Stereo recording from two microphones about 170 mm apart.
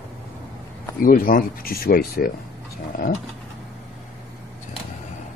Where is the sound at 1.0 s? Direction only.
55° left (ahead or behind).